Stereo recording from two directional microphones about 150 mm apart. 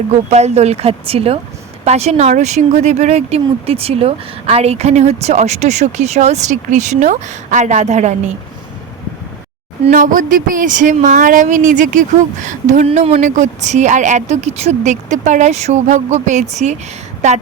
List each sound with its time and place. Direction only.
0.1 s speech: 45° right (ahead or behind)
9.9 s speech: 60° right (ahead or behind)